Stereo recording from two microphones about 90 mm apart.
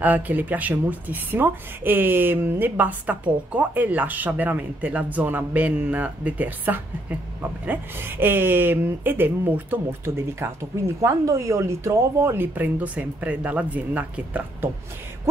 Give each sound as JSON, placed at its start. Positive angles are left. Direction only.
{"t": 0.0, "sound": "speech", "side_deg": -20}